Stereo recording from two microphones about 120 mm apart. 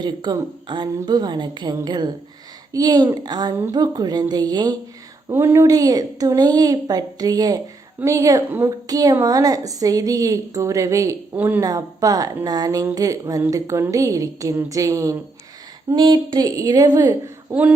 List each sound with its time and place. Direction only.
0.0 s a woman's voice: 35° right (ahead or behind)
5.3 s a woman's voice: 20° right (ahead or behind)
5.6 s a woman's voice: 30° right (ahead or behind)
11.3 s speech: 15° right (ahead or behind)
11.6 s a woman's voice: 30° right (ahead or behind)
16.0 s a woman's voice: 35° right (ahead or behind)
17.5 s speech: 10° right (ahead or behind)